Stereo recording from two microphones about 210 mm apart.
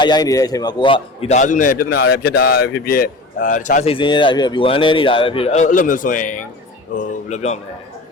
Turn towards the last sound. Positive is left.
turn(degrees=35)  # may be behind; listen again after turning